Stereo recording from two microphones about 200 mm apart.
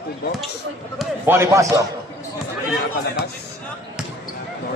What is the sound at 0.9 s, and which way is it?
Speech, 10° right (ahead or behind).